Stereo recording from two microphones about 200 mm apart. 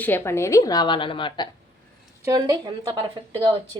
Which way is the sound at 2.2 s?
20° right (ahead or behind).